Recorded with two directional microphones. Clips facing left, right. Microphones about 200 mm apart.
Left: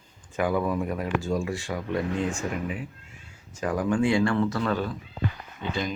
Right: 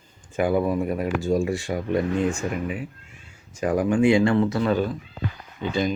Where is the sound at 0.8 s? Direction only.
10° right (ahead or behind).